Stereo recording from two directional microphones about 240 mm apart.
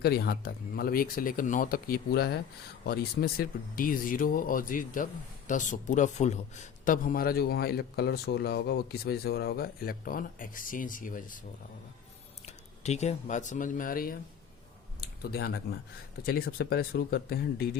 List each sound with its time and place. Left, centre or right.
0.0 s a man's voice: left
12.5 s speech: left
15.2 s a man's voice: left